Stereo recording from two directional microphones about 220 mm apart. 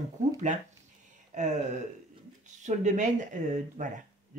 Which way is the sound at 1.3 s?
35° right (ahead or behind).